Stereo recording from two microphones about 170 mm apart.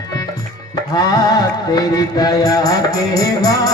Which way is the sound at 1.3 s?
25° left (ahead or behind).